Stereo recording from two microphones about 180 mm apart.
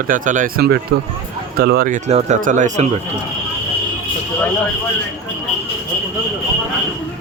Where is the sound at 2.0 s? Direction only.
40° right (ahead or behind).